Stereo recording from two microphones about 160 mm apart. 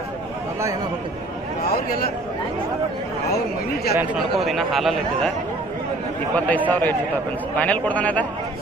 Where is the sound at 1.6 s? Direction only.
65° left (ahead or behind).